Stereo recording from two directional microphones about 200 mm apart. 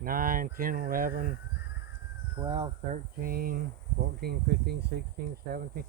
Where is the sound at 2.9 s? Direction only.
45° right (ahead or behind).